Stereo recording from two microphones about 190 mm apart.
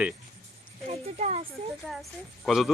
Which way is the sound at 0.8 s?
35° right (ahead or behind).